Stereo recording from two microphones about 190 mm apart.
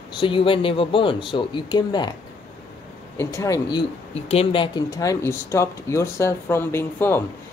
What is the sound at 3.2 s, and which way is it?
Speech, 15° left (ahead or behind).